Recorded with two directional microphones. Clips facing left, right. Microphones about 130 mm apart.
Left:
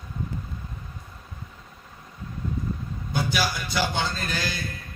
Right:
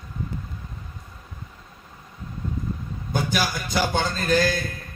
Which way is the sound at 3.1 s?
50° right (ahead or behind).